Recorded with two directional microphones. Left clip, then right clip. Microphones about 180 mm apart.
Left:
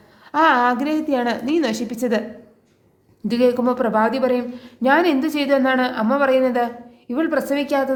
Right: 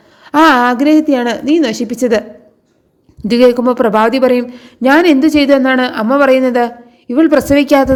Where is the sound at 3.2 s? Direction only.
40° right (ahead or behind).